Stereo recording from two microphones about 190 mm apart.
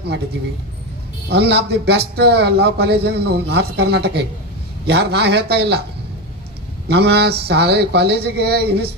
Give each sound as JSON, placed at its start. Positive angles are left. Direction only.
{"t": 1.3, "sound": "speech", "side_deg": -60}
{"t": 6.8, "sound": "speech", "side_deg": -60}